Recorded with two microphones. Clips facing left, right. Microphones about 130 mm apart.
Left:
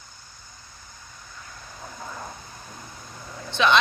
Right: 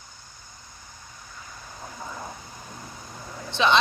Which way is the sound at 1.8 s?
5° right (ahead or behind).